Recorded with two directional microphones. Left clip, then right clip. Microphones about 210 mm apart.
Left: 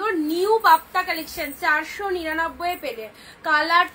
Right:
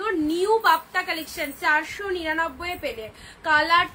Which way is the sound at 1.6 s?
15° right (ahead or behind).